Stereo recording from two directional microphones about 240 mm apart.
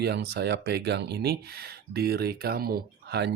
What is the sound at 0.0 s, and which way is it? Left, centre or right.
Speech, right.